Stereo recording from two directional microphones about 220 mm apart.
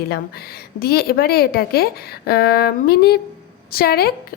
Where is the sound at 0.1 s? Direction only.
45° left (ahead or behind).